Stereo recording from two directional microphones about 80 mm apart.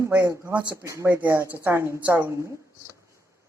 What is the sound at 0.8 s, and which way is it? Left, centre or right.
Speech, right.